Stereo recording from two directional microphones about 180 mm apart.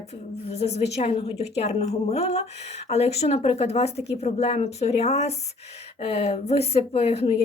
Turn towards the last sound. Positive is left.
turn(degrees=35)  # may be behind; listen again after turning